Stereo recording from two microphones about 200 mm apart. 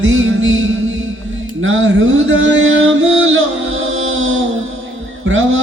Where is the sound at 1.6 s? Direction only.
75° right (ahead or behind).